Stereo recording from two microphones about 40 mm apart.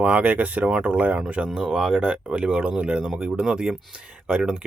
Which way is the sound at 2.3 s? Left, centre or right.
Right.